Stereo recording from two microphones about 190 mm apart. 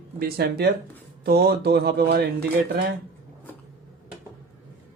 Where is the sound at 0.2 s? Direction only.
55° right (ahead or behind).